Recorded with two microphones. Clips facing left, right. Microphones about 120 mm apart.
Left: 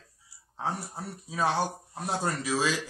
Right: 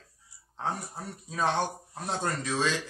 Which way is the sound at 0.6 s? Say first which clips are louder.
Even; 5° left (ahead or behind).